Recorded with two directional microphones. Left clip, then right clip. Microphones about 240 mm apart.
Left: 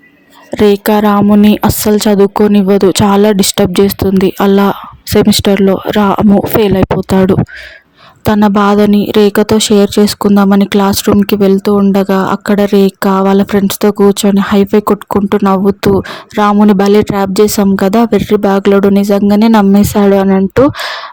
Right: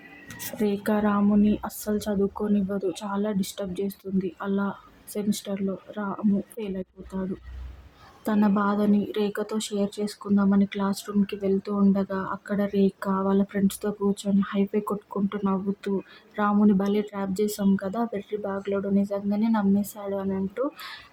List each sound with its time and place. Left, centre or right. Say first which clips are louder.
0.5 s speech: left 18 dB; left
8.2 s speech: left 16 dB; left